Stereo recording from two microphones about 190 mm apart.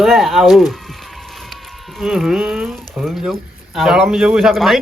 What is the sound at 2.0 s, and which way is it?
Speech, centre (ahead or behind).